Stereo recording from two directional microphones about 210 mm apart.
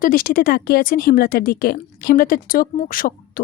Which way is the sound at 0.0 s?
45° left (ahead or behind).